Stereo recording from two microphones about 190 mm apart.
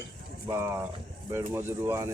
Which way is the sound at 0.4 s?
15° right (ahead or behind).